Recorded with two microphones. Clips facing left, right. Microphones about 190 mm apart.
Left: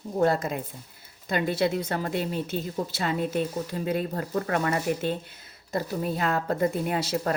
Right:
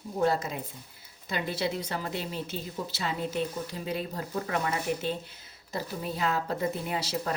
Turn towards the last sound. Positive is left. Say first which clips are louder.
# left 5 dB
turn(degrees=55)  # may be behind; listen again after turning